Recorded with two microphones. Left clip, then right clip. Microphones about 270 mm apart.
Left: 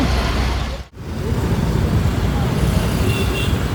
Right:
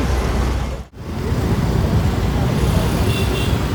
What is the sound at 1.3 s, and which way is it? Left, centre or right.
Vehicle, centre.